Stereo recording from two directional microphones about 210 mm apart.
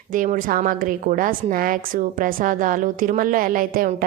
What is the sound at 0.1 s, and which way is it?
A woman's voice, 40° right (ahead or behind).